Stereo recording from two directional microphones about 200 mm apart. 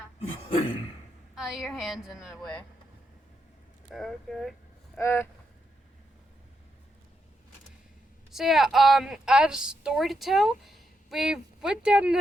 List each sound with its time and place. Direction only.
0.2 s throat clearing: 25° left (ahead or behind)
1.4 s a woman's voice: centre (ahead or behind)
3.9 s a woman's voice: centre (ahead or behind)
4.9 s a sound: 10° left (ahead or behind)
8.3 s a woman's voice: centre (ahead or behind)